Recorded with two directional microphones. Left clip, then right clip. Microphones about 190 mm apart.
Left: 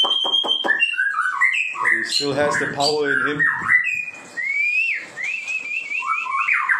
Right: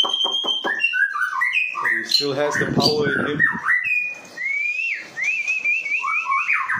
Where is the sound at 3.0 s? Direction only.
5° right (ahead or behind).